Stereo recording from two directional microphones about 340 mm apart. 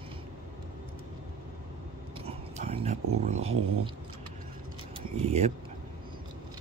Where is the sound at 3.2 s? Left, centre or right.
Centre.